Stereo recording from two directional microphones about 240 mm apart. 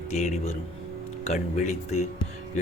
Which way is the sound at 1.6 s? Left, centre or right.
Left.